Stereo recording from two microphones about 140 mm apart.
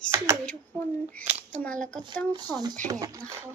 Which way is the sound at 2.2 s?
30° right (ahead or behind).